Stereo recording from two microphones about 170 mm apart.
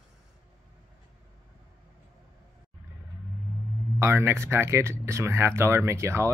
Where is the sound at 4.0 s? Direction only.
15° right (ahead or behind).